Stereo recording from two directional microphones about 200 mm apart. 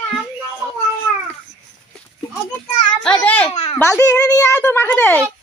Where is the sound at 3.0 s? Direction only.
5° left (ahead or behind).